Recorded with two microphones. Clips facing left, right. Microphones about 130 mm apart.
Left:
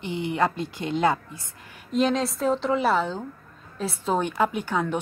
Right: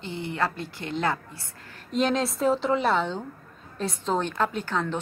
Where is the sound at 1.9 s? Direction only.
Centre (ahead or behind).